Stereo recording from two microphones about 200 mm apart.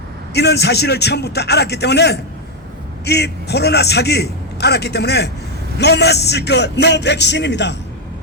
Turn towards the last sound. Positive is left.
turn(degrees=60)  # may be behind; listen again after turning